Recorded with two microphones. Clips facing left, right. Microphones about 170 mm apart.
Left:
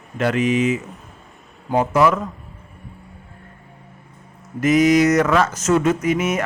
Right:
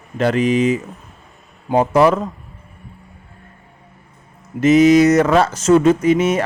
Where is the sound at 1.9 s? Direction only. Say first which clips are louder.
Right 3 dB; 30° right (ahead or behind).